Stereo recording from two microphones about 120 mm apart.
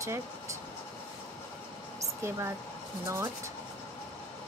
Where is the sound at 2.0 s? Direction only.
25° right (ahead or behind).